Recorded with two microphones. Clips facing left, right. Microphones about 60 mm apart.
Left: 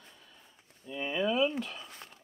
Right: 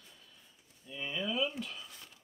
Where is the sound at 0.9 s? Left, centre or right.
Left.